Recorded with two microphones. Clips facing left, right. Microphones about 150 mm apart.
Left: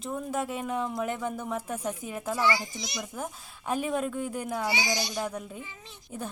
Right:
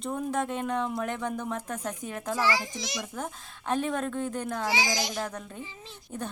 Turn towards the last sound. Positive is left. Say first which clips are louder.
# right 1 dB
turn(degrees=5)  # may be behind; listen again after turning